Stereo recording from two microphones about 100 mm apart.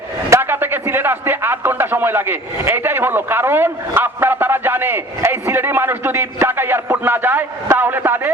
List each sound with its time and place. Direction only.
0.3 s a man's voice: 20° right (ahead or behind)